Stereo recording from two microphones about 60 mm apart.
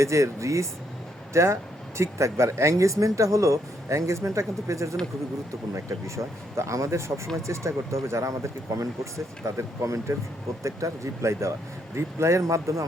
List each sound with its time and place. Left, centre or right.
0.0 s speech: right